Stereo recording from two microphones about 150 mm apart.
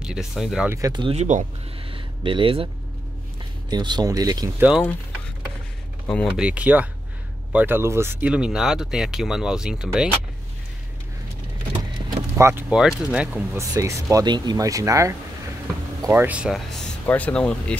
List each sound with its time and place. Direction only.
0.0 s speech: 5° right (ahead or behind)
0.7 s speech: 20° right (ahead or behind)
1.0 s speech: 45° right (ahead or behind)
1.9 s a sound: 35° right (ahead or behind)
3.7 s speech: 30° right (ahead or behind)
4.6 s speech: 5° right (ahead or behind)
6.3 s speech: 10° right (ahead or behind)
12.4 s speech: 15° right (ahead or behind)
12.6 s speech: 5° right (ahead or behind)
13.6 s speech: 20° right (ahead or behind); by 17.7 s 5° left (ahead or behind)